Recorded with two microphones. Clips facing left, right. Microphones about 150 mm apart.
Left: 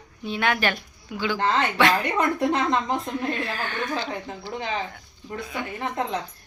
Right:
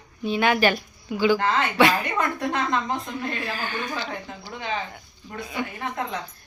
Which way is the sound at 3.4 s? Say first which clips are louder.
Left 1 dB; 5° right (ahead or behind).